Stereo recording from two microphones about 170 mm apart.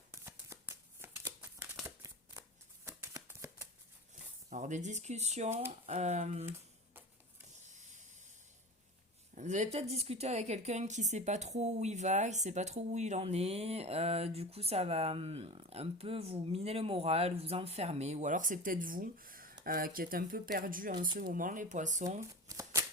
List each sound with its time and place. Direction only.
0.1 s a sound: 15° right (ahead or behind)
2.8 s shuffling cards: 15° right (ahead or behind)
4.4 s a woman's voice: 45° right (ahead or behind)
9.3 s a woman's voice: 45° right (ahead or behind)
22.3 s shuffling cards: 20° right (ahead or behind)